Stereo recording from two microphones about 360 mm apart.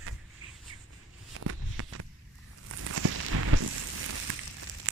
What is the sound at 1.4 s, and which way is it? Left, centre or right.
Walk, right.